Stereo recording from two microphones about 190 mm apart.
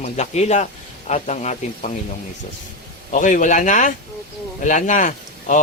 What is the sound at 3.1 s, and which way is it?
Speech, 40° left (ahead or behind).